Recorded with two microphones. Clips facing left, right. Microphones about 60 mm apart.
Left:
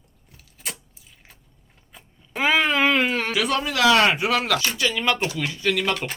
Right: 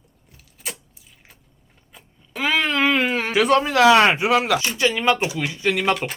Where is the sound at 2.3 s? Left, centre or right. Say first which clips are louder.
Left 1 dB; centre.